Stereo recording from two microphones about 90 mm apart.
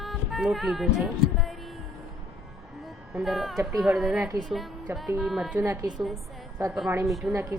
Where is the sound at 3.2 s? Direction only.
Centre (ahead or behind).